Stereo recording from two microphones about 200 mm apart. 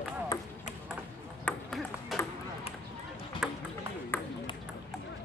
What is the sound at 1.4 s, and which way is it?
Ping, centre (ahead or behind).